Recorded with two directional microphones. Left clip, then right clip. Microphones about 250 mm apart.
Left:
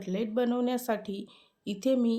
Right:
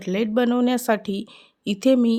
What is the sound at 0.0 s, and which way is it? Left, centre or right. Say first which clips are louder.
Speech: right 8 dB; right.